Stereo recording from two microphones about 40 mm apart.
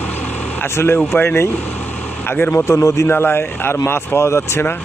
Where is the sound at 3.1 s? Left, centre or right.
Left.